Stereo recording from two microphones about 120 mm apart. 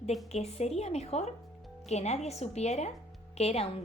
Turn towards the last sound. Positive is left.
turn(degrees=60)  # may be behind; listen again after turning